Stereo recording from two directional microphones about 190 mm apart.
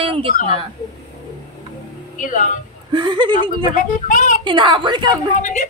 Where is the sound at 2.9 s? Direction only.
25° right (ahead or behind).